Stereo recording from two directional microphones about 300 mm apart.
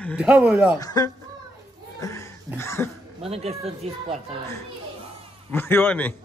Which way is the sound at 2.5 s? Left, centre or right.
Centre.